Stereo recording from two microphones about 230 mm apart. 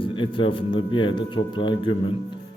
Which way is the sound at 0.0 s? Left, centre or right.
Left.